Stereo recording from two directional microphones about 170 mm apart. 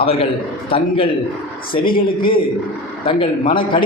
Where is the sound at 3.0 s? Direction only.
30° left (ahead or behind).